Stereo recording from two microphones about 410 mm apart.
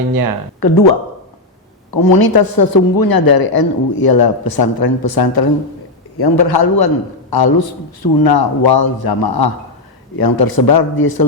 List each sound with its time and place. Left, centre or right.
0.1 s speech: right
0.6 s a man's voice: left
1.9 s a man's voice: left